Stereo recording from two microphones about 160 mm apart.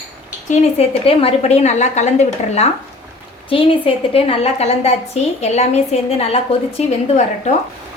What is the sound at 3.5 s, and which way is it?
A woman's voice, 35° left (ahead or behind).